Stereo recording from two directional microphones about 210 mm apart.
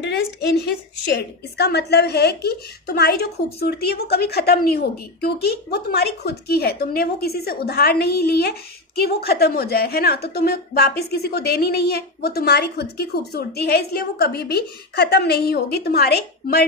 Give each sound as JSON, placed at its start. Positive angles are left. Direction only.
{"t": 0.0, "sound": "a woman's voice", "side_deg": 50}